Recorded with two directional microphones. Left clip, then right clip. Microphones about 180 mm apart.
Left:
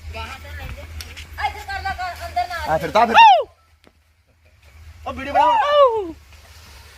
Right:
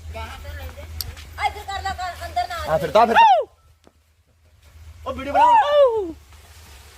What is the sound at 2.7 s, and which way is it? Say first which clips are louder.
Speech: right 1 dB; 65° right (ahead or behind).